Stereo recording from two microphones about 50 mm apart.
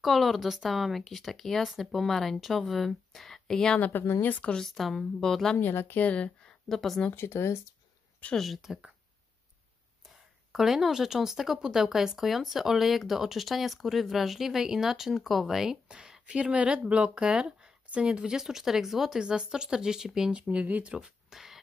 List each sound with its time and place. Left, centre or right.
0.0 s speech: centre
4.2 s speech: left
4.6 s speech: centre
5.6 s a woman's voice: left
6.0 s speech: left
6.4 s a sound: centre
7.2 s speech: left
8.4 s speech: centre
10.0 s speech: centre
16.0 s speech: centre
20.3 s speech: right
20.8 s speech: right
21.3 s beatboxing: centre